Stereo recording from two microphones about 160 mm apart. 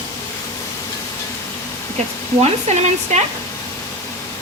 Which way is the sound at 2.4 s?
45° right (ahead or behind).